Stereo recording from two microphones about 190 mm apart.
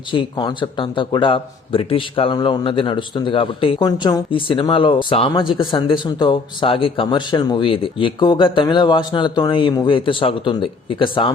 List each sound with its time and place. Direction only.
0.1 s speech: 25° left (ahead or behind)